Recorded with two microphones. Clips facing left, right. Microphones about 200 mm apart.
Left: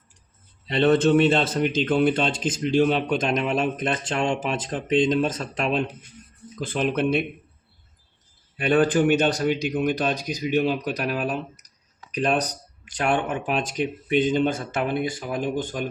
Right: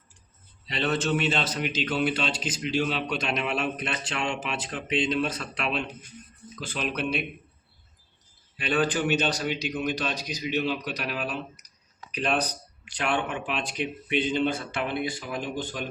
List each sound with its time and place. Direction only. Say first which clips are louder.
0.7 s a man's voice: left 9 dB; 50° left (ahead or behind)
8.5 s a man's voice: left 7 dB; 50° left (ahead or behind)